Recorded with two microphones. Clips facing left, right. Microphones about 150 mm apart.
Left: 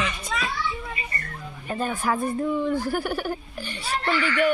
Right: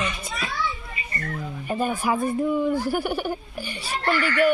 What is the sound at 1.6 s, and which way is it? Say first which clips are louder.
Speech: right 2 dB; 10° right (ahead or behind).